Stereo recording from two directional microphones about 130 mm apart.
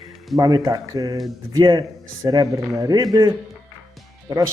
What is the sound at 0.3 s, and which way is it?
A man's voice, 30° right (ahead or behind).